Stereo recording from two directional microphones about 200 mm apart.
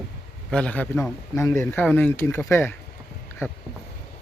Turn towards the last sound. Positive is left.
turn(degrees=10)  # may be behind; listen again after turning